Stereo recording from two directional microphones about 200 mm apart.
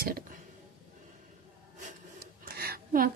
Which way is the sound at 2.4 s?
50° right (ahead or behind).